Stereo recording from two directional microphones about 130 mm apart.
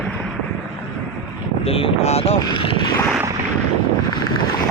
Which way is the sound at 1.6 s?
45° left (ahead or behind).